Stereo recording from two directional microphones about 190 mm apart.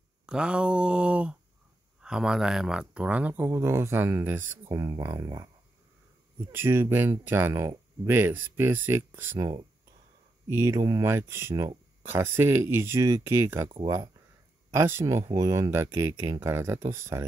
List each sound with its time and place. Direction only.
0.3 s mantra: 5° right (ahead or behind)
2.0 s speech: 5° right (ahead or behind)
10.5 s speech: 15° right (ahead or behind)